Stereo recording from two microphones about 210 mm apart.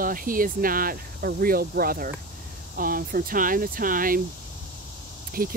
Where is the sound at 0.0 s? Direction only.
40° right (ahead or behind).